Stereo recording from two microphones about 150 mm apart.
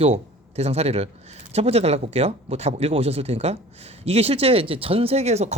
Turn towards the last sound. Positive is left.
turn(degrees=-45)  # may be behind; listen again after turning